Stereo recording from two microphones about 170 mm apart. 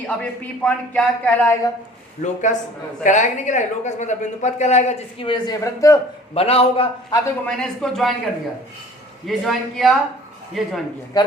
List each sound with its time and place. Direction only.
0.1 s speech: 5° left (ahead or behind)
2.2 s speech: 45° left (ahead or behind); by 6.0 s 20° left (ahead or behind)
6.3 s a man's voice: 35° left (ahead or behind)
7.1 s speech: 15° left (ahead or behind)
7.5 s a man's voice: 5° left (ahead or behind)
9.2 s a man's voice: centre (ahead or behind)
11.1 s a man's voice: 20° left (ahead or behind)